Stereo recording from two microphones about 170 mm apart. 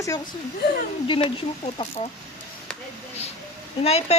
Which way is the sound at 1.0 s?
30° left (ahead or behind).